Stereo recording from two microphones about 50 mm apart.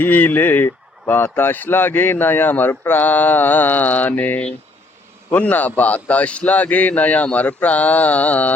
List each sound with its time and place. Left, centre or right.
0.0 s speech: left